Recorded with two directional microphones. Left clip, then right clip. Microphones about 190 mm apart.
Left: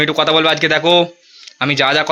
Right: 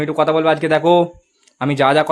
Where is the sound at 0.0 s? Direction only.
5° right (ahead or behind).